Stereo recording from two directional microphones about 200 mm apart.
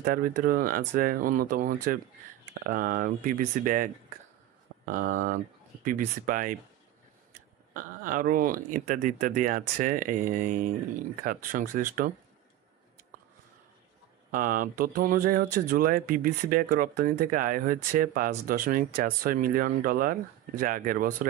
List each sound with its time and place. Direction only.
0.0 s speech: 45° right (ahead or behind)
7.7 s speech: 45° right (ahead or behind)
14.3 s speech: 45° right (ahead or behind)